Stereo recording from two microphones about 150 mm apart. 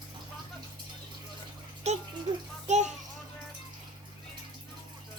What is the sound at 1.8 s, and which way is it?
A child's voice, 50° right (ahead or behind).